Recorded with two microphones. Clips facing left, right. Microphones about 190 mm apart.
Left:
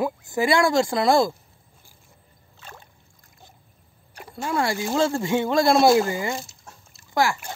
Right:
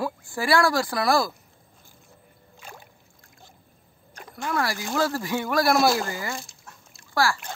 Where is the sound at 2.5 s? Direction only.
10° right (ahead or behind).